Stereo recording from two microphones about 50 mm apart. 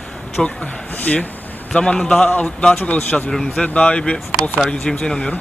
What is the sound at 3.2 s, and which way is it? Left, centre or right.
Speech, centre.